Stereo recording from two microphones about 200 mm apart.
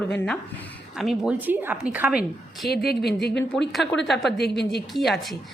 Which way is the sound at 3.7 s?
Centre (ahead or behind).